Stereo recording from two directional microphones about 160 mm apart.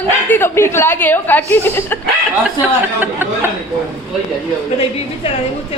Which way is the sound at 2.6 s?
10° right (ahead or behind).